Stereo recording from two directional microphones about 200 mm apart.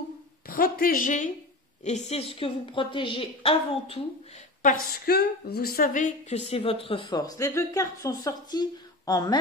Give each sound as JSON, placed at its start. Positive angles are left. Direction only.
{"t": 0.5, "sound": "a woman's voice", "side_deg": 45}
{"t": 4.6, "sound": "a woman's voice", "side_deg": 50}